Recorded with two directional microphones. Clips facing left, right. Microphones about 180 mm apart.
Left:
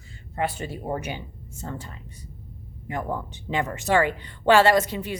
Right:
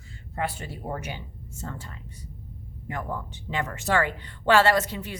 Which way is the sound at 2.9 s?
20° left (ahead or behind).